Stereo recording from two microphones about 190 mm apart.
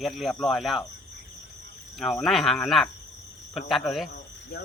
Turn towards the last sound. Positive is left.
turn(degrees=0)  # may be behind; listen again after turning